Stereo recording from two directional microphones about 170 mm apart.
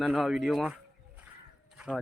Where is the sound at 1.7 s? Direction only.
5° right (ahead or behind).